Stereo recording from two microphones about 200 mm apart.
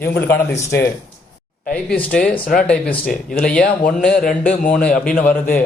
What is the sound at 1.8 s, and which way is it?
A man's voice, 5° left (ahead or behind).